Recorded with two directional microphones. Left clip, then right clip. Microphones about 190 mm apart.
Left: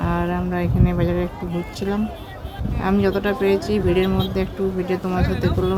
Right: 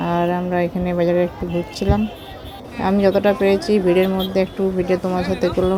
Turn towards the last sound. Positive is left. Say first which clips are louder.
# right 4 dB
turn(degrees=-15)  # may be behind; listen again after turning